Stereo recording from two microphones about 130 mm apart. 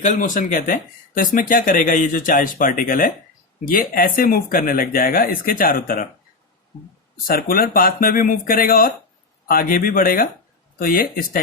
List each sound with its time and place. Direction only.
0.0 s speech: 85° left
7.3 s speech: 90° left